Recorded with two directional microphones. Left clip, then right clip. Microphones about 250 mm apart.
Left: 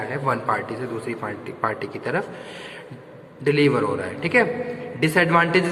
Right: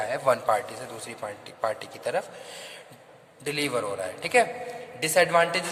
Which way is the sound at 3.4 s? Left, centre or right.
Right.